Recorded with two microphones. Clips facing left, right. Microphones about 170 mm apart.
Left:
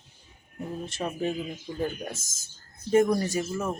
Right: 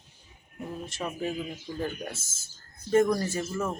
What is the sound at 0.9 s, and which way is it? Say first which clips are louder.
Speech: left 3 dB; 30° left (ahead or behind).